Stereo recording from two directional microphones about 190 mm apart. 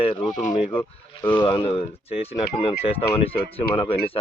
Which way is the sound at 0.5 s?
25° left (ahead or behind).